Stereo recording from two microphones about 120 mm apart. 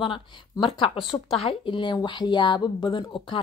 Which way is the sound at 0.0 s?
45° left (ahead or behind).